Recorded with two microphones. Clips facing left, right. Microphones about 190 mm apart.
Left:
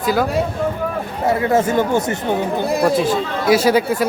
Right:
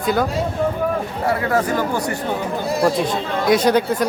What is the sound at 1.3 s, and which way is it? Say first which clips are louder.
Speech: left 3 dB; 25° left (ahead or behind).